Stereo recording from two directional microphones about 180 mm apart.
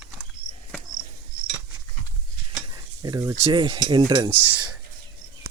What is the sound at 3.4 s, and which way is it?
Cutlery, 30° right (ahead or behind).